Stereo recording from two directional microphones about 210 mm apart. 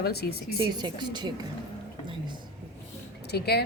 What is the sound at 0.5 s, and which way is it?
Speech, 20° right (ahead or behind).